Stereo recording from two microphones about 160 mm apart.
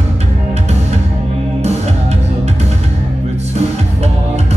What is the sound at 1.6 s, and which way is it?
Music, 45° right (ahead or behind).